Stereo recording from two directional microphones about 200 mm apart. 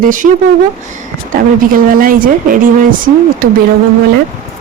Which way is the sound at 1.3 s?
45° right (ahead or behind).